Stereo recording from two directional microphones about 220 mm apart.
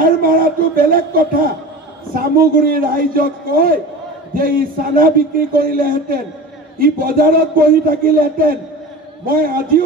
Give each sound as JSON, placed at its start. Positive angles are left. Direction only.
{"t": 0.0, "sound": "a man's voice", "side_deg": -40}